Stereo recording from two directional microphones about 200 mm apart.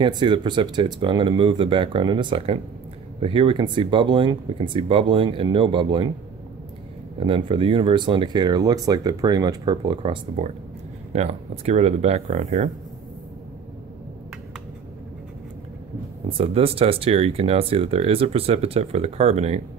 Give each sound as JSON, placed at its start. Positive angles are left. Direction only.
{"t": 0.0, "sound": "speech", "side_deg": -25}
{"t": 7.2, "sound": "speech", "side_deg": -25}
{"t": 10.4, "sound": "speech", "side_deg": -35}
{"t": 16.3, "sound": "speech", "side_deg": -30}